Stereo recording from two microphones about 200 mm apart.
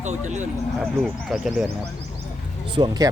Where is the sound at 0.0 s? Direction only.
35° right (ahead or behind).